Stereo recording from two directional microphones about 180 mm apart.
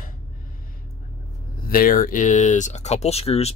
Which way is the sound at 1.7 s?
50° left (ahead or behind).